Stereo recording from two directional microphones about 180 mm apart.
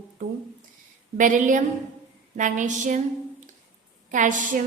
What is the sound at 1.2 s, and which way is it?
A woman's voice, 45° right (ahead or behind).